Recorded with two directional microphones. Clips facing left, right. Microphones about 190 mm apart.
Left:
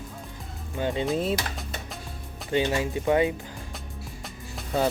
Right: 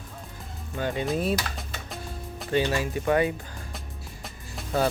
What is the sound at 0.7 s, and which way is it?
Speech, 20° left (ahead or behind).